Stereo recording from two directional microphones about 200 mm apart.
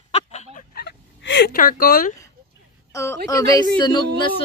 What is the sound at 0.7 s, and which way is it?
Fowl, 55° left (ahead or behind).